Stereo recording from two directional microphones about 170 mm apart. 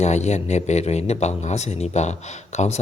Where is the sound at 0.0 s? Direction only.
40° left (ahead or behind).